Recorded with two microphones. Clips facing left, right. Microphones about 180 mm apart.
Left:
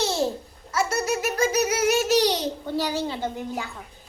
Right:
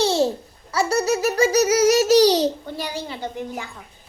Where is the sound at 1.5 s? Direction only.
75° right (ahead or behind).